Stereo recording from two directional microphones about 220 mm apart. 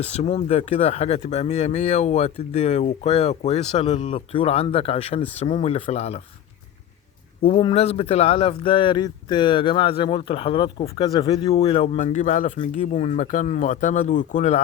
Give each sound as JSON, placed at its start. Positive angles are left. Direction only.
{"t": 0.0, "sound": "speech", "side_deg": 30}
{"t": 7.4, "sound": "speech", "side_deg": 25}